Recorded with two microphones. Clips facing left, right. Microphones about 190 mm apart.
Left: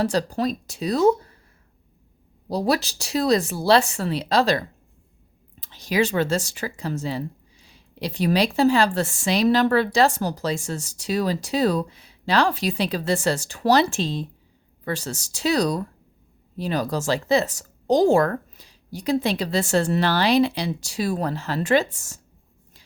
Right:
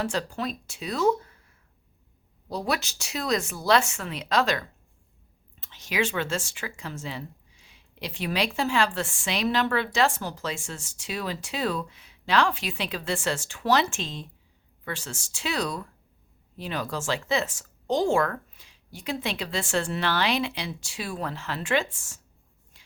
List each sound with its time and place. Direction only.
0.0 s speech: 40° left (ahead or behind)
2.5 s speech: 35° left (ahead or behind)